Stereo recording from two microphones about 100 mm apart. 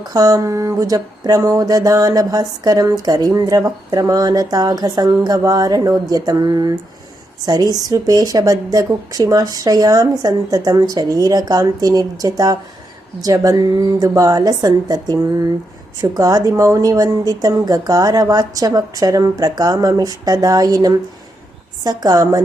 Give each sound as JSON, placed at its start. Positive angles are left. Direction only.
{"t": 0.0, "sound": "speech", "side_deg": -40}